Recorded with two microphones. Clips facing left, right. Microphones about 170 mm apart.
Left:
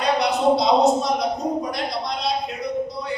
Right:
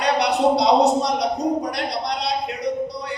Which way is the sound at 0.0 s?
70° right (ahead or behind).